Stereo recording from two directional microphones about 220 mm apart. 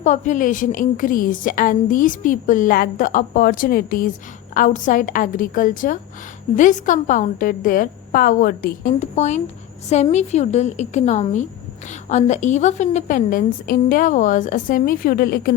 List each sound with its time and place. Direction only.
0.0 s a woman's voice: 35° left (ahead or behind)